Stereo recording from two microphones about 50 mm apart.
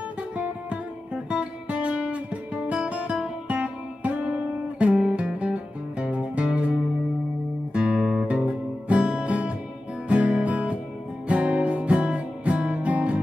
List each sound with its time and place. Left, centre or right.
0.4 s music: right
1.3 s guitar: right
3.4 s music: right
7.7 s guitar: right
10.0 s music: right